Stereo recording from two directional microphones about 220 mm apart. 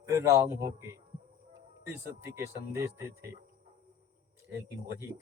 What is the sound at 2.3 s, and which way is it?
Speech, 15° right (ahead or behind).